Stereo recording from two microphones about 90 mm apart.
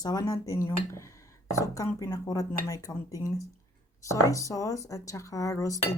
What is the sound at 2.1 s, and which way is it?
Speech, 45° left (ahead or behind).